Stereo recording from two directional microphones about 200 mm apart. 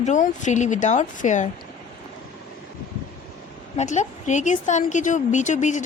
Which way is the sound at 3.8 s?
35° left (ahead or behind).